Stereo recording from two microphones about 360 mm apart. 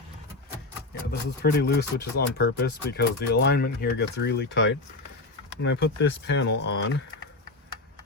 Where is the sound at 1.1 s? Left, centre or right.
Left.